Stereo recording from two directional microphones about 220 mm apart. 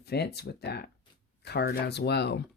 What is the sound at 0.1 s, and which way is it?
Speech, 50° left (ahead or behind).